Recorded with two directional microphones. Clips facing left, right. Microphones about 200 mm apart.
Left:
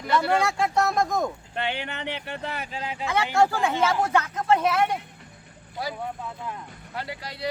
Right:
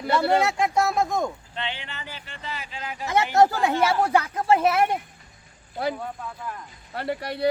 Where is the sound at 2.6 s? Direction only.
35° left (ahead or behind).